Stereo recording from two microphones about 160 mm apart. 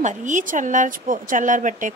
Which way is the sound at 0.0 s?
50° right (ahead or behind).